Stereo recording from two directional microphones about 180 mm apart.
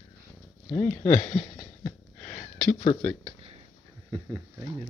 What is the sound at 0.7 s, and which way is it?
Speech, 10° left (ahead or behind).